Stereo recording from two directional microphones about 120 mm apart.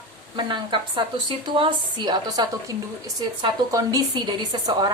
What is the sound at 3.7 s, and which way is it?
Speech, 30° right (ahead or behind).